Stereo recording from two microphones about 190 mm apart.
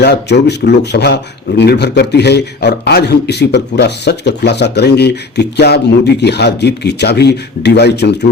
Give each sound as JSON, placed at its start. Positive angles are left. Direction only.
{"t": 0.0, "sound": "speech", "side_deg": 60}